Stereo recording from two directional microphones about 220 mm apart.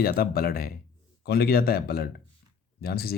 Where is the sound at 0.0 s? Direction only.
45° left (ahead or behind).